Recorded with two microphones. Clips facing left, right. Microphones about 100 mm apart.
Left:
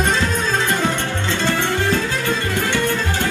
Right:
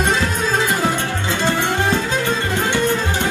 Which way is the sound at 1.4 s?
20° right (ahead or behind).